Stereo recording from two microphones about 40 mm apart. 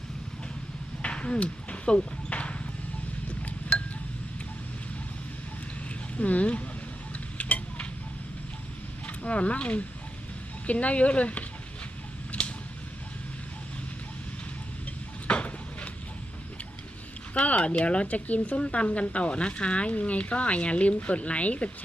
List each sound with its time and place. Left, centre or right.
1.0 s horse: left
3.2 s wind chime: left
6.1 s speech: left
7.3 s tick-tock: left
9.0 s speech: left
12.3 s a sound: left
15.3 s a sound: left
17.3 s speech: left
18.6 s speech: left